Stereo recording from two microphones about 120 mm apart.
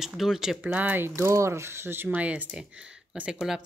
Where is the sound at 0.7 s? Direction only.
15° right (ahead or behind).